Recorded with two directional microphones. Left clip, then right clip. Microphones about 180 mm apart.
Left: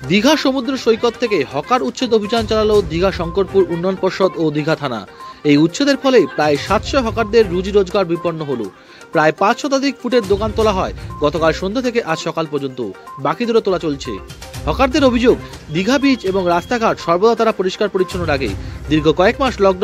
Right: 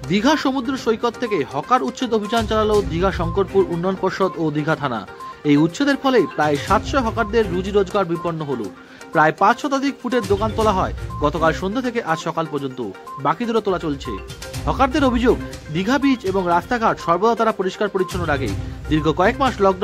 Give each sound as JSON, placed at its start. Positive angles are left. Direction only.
{"t": 0.1, "sound": "speech", "side_deg": 25}